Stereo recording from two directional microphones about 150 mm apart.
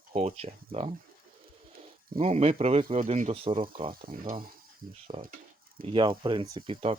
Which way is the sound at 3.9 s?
70° right (ahead or behind).